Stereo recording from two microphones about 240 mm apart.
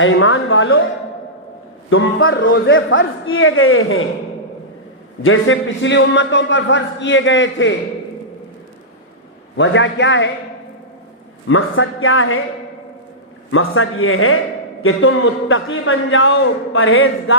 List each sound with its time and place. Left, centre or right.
0.0 s a man's voice: left
1.9 s a man's voice: left
5.2 s a man's voice: left
9.6 s a man's voice: left
11.4 s a man's voice: left
13.5 s a man's voice: left